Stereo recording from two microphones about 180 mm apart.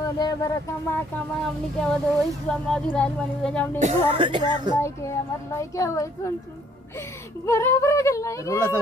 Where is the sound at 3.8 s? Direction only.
40° right (ahead or behind).